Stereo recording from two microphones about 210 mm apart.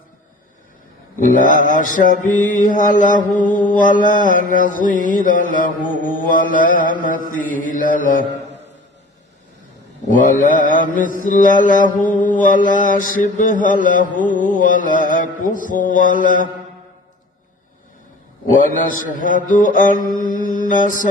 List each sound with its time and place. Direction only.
1.2 s mantra: 40° left (ahead or behind)
10.1 s mantra: 40° left (ahead or behind)
19.2 s mantra: 40° left (ahead or behind)